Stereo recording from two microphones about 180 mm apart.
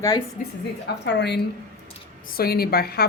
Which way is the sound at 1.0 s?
75° left (ahead or behind).